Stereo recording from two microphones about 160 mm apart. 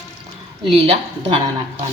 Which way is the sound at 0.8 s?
40° right (ahead or behind).